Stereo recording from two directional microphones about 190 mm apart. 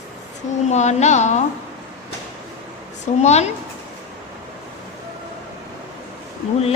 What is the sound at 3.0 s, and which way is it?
Speech, 35° left (ahead or behind).